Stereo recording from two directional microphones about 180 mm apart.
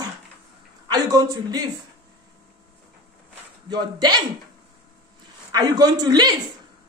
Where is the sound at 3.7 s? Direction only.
20° right (ahead or behind).